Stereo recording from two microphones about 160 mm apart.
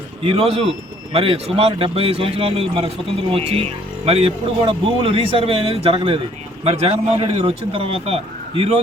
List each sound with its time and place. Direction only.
0.3 s speech: 35° right (ahead or behind)